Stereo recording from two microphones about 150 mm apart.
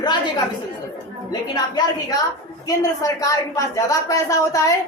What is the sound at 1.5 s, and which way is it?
A woman's voice, 30° left (ahead or behind).